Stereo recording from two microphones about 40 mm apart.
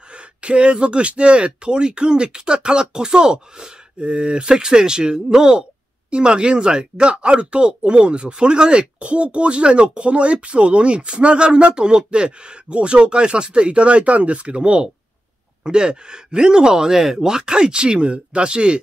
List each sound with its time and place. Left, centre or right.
0.1 s speech: right